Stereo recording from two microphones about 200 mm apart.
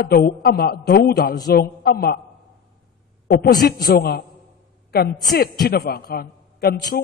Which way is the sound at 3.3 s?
50° left (ahead or behind).